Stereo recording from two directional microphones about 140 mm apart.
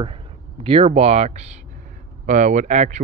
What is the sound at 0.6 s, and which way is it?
Speech, 45° right (ahead or behind).